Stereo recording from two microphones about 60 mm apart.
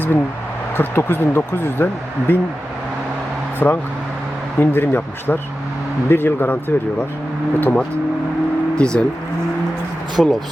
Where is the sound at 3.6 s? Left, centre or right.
Left.